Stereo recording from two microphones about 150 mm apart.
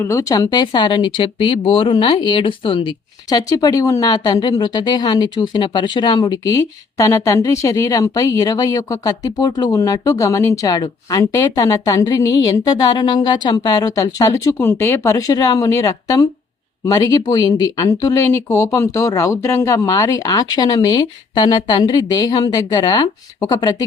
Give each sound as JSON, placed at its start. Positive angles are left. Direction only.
{"t": 0.0, "sound": "speech", "side_deg": 20}